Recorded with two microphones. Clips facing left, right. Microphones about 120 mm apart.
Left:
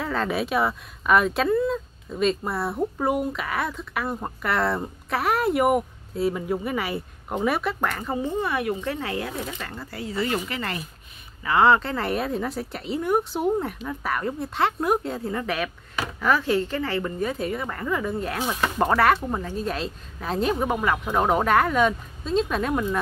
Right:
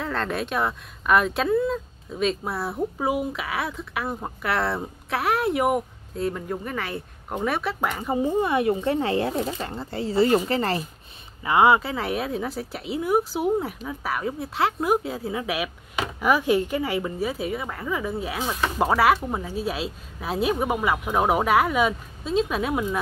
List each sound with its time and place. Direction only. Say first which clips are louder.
0.0 s speech: left 2 dB; 5° left (ahead or behind)
7.9 s speech: right 3 dB; 15° right (ahead or behind); by 10.9 s 35° right (ahead or behind)
11.4 s speech: right 1 dB; 15° right (ahead or behind)